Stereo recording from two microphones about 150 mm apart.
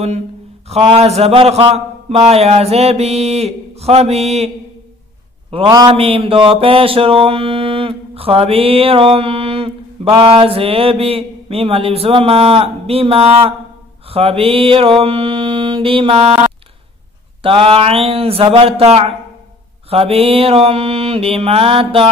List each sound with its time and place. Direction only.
0.7 s a man's voice: 45° right (ahead or behind)
5.5 s mantra: 40° right (ahead or behind)
17.4 s mantra: 35° right (ahead or behind)